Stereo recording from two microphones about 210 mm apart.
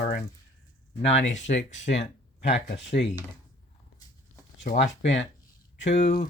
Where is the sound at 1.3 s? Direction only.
35° left (ahead or behind).